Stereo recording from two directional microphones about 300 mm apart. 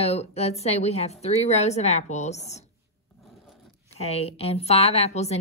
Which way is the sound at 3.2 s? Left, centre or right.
Centre.